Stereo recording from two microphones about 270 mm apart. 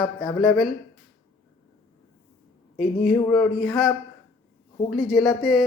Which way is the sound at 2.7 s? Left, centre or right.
Left.